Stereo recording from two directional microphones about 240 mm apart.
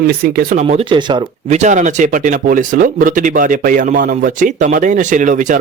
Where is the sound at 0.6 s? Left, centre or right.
Right.